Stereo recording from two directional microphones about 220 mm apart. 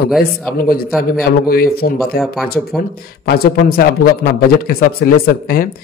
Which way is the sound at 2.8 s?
45° left (ahead or behind).